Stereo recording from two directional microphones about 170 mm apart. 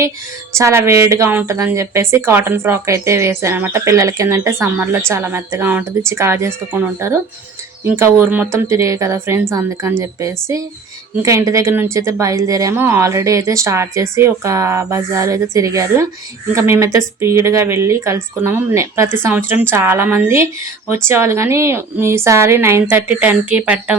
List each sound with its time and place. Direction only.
0.5 s speech: 15° right (ahead or behind)